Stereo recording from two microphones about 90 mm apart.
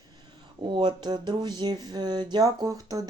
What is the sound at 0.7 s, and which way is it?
Speech, 60° right (ahead or behind).